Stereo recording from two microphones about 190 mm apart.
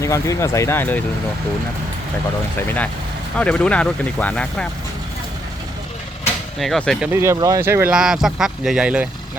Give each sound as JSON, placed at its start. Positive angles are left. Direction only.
{"t": 0.0, "sound": "speech", "side_deg": 15}
{"t": 2.6, "sound": "speech", "side_deg": 10}
{"t": 6.6, "sound": "speech", "side_deg": 0}
{"t": 7.1, "sound": "speech", "side_deg": -15}